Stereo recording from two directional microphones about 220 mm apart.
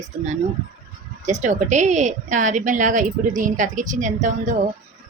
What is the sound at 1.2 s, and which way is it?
A woman's voice, 35° right (ahead or behind).